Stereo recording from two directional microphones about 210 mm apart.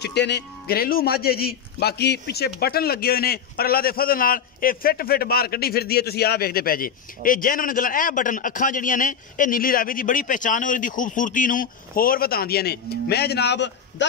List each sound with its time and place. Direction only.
0.0 s a man's voice: 55° left (ahead or behind)